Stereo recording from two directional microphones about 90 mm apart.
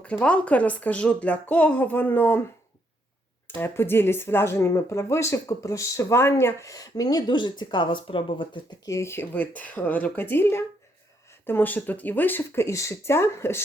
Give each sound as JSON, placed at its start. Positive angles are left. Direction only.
{"t": 0.0, "sound": "speech", "side_deg": 15}
{"t": 3.4, "sound": "speech", "side_deg": 25}
{"t": 8.8, "sound": "speech", "side_deg": 35}